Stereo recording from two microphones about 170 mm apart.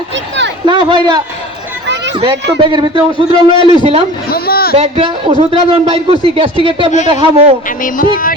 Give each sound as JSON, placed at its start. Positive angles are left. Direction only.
{"t": 0.6, "sound": "speech", "side_deg": -30}
{"t": 2.6, "sound": "a man's voice", "side_deg": -25}
{"t": 4.3, "sound": "a sound", "side_deg": 65}
{"t": 4.7, "sound": "a man's voice", "side_deg": -35}
{"t": 7.8, "sound": "speech", "side_deg": 50}